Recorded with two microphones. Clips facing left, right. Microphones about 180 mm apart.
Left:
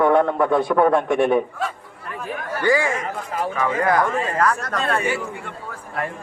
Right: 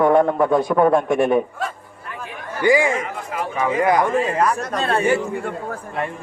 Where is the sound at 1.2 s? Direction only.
Centre (ahead or behind).